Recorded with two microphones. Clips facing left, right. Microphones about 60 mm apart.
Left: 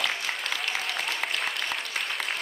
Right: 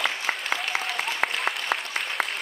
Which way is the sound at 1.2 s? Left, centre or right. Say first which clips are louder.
Right 3 dB; right.